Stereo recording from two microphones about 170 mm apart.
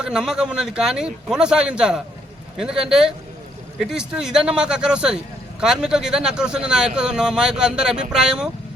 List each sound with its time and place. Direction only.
0.0 s speech: 5° right (ahead or behind)